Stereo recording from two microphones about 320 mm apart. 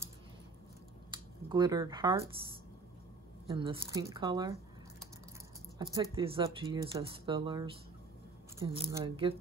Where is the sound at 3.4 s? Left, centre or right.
Centre.